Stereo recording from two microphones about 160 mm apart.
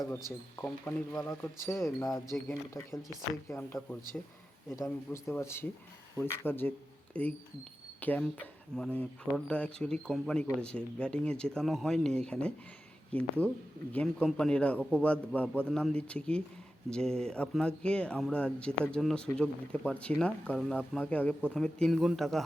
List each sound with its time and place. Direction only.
0.9 s speech: 15° left (ahead or behind)